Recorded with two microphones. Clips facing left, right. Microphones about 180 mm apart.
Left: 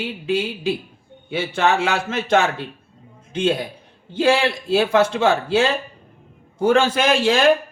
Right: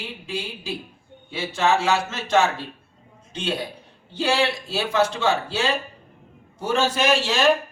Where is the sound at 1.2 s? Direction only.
60° left (ahead or behind).